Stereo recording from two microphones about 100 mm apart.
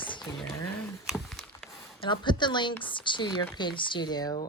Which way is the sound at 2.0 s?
50° left (ahead or behind).